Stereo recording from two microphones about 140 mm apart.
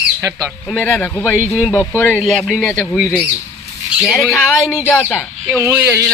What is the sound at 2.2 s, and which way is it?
Speech, centre (ahead or behind).